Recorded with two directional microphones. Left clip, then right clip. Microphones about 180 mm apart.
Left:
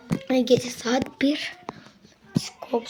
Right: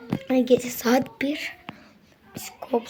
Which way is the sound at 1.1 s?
15° left (ahead or behind).